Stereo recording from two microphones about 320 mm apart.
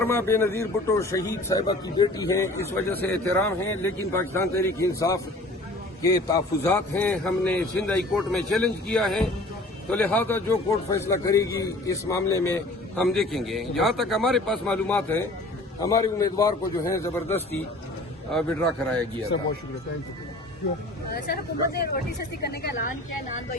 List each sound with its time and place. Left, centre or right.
0.0 s a man's voice: centre
21.8 s speech: left